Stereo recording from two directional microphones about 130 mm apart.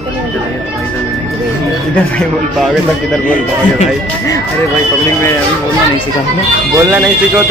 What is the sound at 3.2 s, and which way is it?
Speech, 80° left.